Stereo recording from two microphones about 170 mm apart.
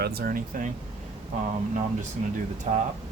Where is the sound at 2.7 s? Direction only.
40° right (ahead or behind).